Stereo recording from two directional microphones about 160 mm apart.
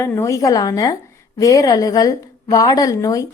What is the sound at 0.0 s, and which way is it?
A woman's voice, 20° left (ahead or behind).